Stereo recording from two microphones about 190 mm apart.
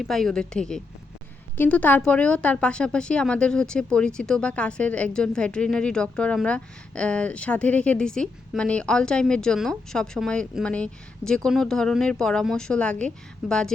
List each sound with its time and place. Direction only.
0.0 s a woman's voice: centre (ahead or behind)